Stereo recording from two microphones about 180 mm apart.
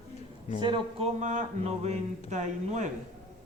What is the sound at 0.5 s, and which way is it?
Speech, 30° right (ahead or behind).